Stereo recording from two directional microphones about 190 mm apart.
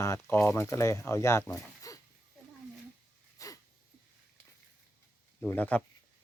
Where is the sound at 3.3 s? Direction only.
20° left (ahead or behind).